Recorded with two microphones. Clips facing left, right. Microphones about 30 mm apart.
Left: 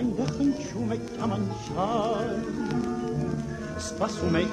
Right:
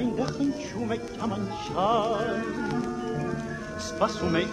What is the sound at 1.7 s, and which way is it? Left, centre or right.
Music, right.